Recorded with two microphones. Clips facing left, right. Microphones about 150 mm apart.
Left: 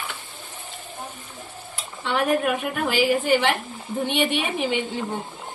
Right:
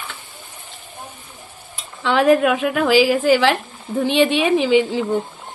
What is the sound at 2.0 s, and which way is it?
A woman's voice, 90° right.